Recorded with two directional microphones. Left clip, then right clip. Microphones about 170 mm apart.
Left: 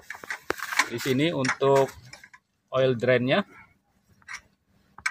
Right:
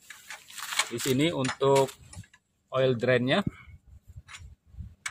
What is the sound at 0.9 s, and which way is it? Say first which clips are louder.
Speech: left 2 dB; 10° right (ahead or behind).